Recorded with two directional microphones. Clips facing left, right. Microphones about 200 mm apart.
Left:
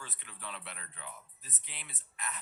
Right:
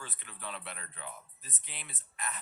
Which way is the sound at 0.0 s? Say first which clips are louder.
Right 2 dB; 45° right (ahead or behind).